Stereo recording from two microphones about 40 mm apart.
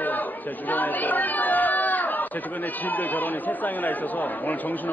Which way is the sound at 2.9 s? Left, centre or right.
Left.